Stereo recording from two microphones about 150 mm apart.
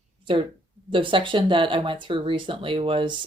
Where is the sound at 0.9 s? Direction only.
35° right (ahead or behind).